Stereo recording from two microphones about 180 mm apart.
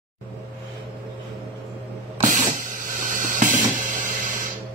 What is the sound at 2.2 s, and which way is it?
Hiss, 45° right (ahead or behind).